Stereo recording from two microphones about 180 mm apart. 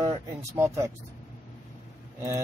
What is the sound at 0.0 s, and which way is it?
Speech, 15° right (ahead or behind).